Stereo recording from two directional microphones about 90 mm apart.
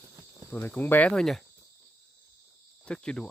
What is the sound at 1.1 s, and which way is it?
Speech, 5° left (ahead or behind).